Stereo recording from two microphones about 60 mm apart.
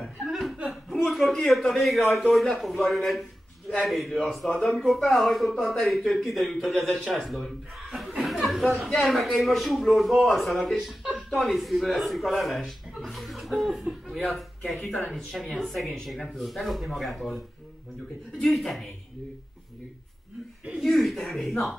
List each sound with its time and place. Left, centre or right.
0.0 s chuckle: centre
0.7 s a sound: centre
1.1 s speech: centre
8.2 s chatter: centre
8.6 s a man's voice: centre
18.4 s speech: centre
20.8 s speech: centre